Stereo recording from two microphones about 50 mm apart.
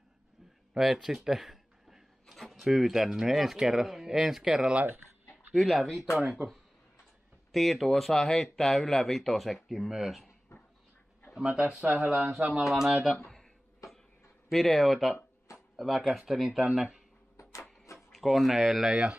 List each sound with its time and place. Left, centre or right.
1.0 s speech: centre
11.3 s speech: centre
11.8 s speech: right
12.6 s speech: centre
14.5 s speech: centre
17.4 s printer: left
17.9 s speech: centre
18.9 s speech: centre